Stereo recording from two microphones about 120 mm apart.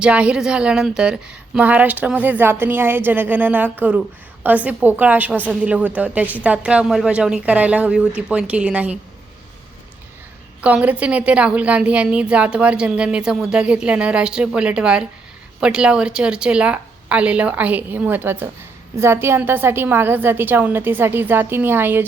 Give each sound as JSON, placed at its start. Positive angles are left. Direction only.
{"t": 0.0, "sound": "a woman's voice", "side_deg": -10}
{"t": 10.6, "sound": "a woman's voice", "side_deg": -10}